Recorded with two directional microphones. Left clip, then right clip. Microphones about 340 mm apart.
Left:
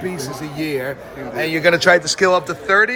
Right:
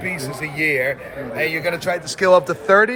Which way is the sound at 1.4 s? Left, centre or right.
Centre.